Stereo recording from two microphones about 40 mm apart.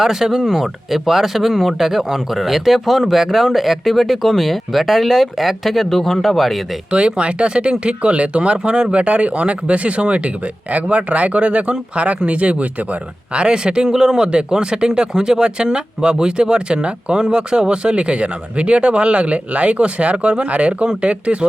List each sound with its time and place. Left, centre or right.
0.0 s speech: centre
6.9 s speech: right